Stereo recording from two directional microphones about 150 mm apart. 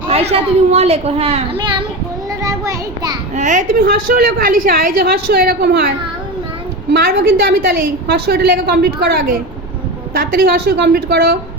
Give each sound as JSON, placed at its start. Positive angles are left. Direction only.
{"t": 0.1, "sound": "a woman's voice", "side_deg": -45}
{"t": 2.4, "sound": "a sound", "side_deg": -25}
{"t": 3.3, "sound": "a woman's voice", "side_deg": -55}
{"t": 6.9, "sound": "a woman's voice", "side_deg": -90}